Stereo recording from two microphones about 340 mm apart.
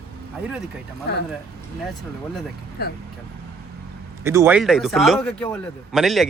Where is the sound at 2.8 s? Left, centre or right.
Left.